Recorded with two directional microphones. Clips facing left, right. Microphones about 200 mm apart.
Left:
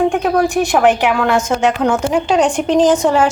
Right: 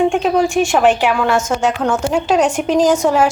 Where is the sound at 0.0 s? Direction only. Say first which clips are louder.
Even; centre (ahead or behind).